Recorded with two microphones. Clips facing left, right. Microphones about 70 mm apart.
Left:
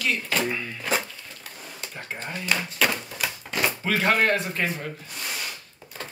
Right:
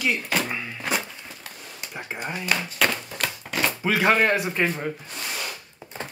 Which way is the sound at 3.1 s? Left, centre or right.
Centre.